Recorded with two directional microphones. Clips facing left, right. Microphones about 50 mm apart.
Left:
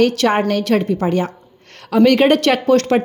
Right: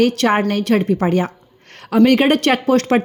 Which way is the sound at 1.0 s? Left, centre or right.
Right.